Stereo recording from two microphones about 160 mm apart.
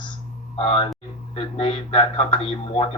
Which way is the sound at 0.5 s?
35° left (ahead or behind).